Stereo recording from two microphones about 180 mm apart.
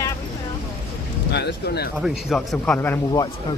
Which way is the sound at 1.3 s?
70° left (ahead or behind).